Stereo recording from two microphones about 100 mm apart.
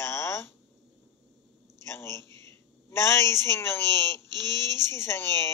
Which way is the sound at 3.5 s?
25° left (ahead or behind).